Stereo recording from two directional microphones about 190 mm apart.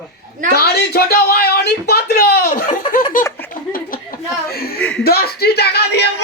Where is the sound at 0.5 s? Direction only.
55° left (ahead or behind).